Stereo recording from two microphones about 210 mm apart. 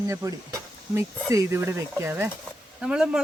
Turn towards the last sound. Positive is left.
turn(degrees=-5)  # may be behind; listen again after turning